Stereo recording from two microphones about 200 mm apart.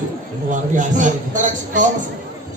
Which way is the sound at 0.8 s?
40° right (ahead or behind).